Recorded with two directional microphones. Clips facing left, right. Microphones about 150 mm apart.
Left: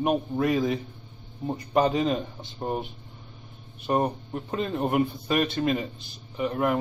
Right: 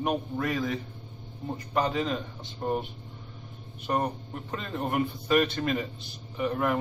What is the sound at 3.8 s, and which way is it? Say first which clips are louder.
A man's voice: left 4 dB; 20° left (ahead or behind).